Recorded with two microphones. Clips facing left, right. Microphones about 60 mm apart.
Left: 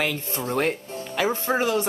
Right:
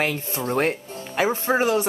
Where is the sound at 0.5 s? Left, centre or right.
Right.